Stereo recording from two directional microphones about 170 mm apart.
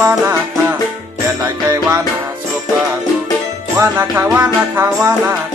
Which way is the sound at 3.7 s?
10° right (ahead or behind).